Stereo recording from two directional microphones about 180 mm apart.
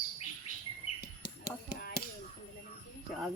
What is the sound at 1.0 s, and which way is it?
Tap, 60° left (ahead or behind).